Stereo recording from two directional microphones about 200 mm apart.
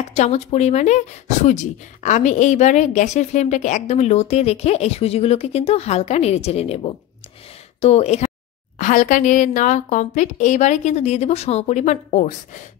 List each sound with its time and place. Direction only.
0.1 s speech: 35° left (ahead or behind)